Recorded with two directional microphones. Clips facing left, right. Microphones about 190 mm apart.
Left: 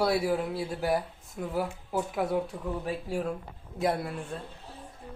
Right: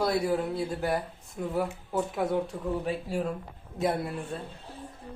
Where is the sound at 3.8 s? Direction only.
Centre (ahead or behind).